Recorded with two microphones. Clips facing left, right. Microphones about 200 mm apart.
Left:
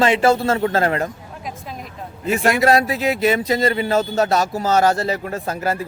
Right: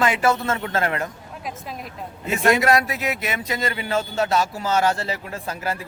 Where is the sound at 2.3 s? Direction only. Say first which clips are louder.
Left 2 dB; 30° left (ahead or behind).